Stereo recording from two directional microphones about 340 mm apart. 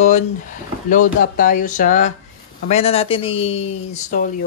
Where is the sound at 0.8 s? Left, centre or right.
Left.